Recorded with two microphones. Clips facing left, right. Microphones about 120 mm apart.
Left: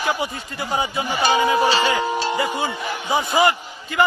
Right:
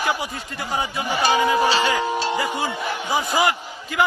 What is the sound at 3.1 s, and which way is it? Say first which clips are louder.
Speech: left 3 dB; centre (ahead or behind).